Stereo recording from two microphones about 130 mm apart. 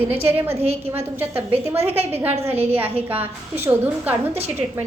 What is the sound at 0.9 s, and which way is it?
A woman's voice, 15° right (ahead or behind).